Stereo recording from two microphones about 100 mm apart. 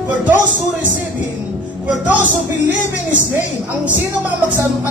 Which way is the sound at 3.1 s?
15° right (ahead or behind).